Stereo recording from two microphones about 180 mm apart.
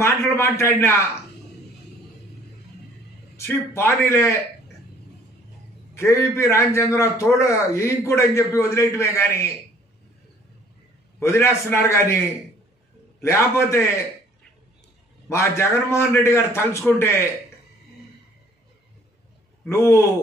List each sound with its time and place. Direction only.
0.0 s a man's voice: 15° left (ahead or behind)
3.3 s a man's voice: 15° left (ahead or behind)
5.9 s a man's voice: 15° left (ahead or behind)
11.1 s a man's voice: 15° left (ahead or behind)
13.2 s a man's voice: 15° left (ahead or behind)
15.2 s a man's voice: 15° left (ahead or behind)
19.7 s a man's voice: 15° left (ahead or behind)